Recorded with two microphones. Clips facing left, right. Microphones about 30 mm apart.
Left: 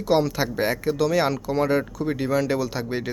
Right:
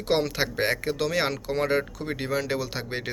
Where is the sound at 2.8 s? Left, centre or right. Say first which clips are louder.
Left 5 dB; right.